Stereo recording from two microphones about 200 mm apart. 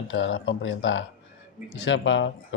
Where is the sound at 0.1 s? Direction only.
65° left (ahead or behind).